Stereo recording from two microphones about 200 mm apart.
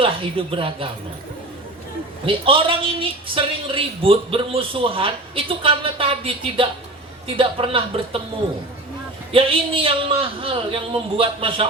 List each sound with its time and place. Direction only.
0.0 s a woman's voice: 25° right (ahead or behind)
2.2 s a woman's voice: 25° right (ahead or behind)
9.3 s a woman's voice: 25° right (ahead or behind)